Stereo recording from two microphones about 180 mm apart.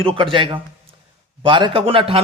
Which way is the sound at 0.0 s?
30° right (ahead or behind).